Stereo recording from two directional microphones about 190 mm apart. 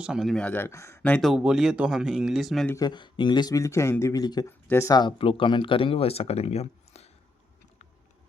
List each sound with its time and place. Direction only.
0.0 s speech: centre (ahead or behind)
2.6 s speech: 20° left (ahead or behind)